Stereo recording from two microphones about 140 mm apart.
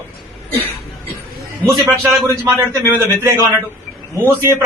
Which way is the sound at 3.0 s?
15° right (ahead or behind).